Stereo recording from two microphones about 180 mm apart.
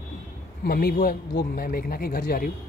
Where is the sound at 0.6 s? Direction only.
55° left (ahead or behind).